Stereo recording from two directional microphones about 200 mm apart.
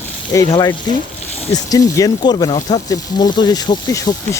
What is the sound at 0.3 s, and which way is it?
Speech, 15° left (ahead or behind).